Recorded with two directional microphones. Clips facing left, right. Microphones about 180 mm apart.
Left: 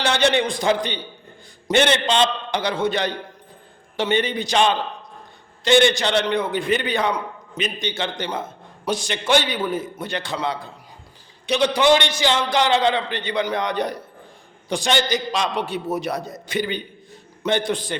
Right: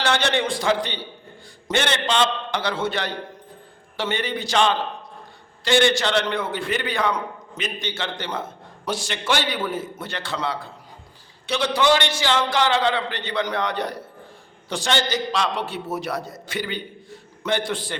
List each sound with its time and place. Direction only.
0.0 s a man's voice: 15° left (ahead or behind)